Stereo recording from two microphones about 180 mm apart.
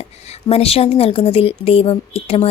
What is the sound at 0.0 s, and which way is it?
A woman's voice, 35° left (ahead or behind).